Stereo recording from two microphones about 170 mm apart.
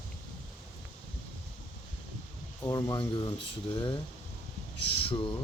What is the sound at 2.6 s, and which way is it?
Speech, 20° left (ahead or behind).